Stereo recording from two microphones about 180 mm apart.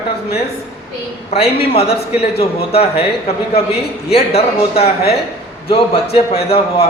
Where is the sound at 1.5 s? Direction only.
35° left (ahead or behind).